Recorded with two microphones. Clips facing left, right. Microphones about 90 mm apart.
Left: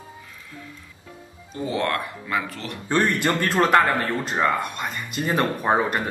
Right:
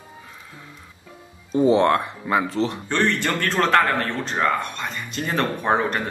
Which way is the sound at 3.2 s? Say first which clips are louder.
Left 1 dB; 10° left (ahead or behind).